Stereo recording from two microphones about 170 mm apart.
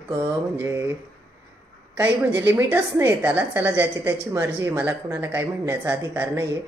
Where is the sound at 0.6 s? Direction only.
15° right (ahead or behind).